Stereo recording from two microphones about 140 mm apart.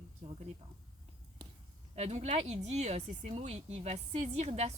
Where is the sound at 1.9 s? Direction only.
50° right (ahead or behind).